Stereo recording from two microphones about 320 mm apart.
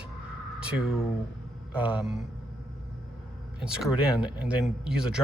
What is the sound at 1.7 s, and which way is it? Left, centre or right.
Speech, centre.